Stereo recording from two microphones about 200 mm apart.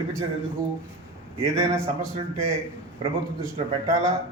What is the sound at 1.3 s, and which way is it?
Speech, 15° right (ahead or behind).